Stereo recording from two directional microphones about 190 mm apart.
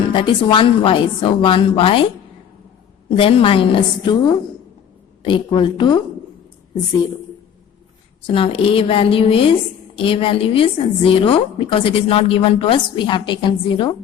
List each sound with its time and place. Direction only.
0.1 s a woman's voice: 25° left (ahead or behind)
3.2 s a woman's voice: 30° left (ahead or behind)
8.3 s a woman's voice: 30° left (ahead or behind)